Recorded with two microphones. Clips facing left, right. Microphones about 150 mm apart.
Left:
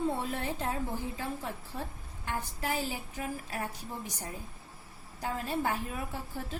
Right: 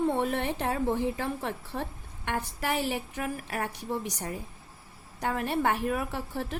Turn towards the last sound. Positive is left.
turn(degrees=-70)  # may be behind; listen again after turning